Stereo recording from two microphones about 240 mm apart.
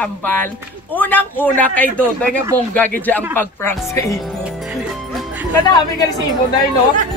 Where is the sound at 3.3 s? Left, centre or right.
Centre.